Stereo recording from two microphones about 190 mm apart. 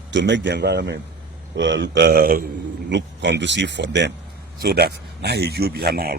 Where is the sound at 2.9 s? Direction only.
65° right (ahead or behind).